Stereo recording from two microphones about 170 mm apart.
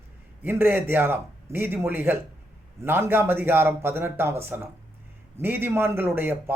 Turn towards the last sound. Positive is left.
turn(degrees=-15)  # may be behind; listen again after turning